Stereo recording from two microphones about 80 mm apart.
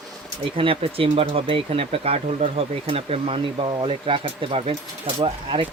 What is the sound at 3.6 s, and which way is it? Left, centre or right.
Speech, right.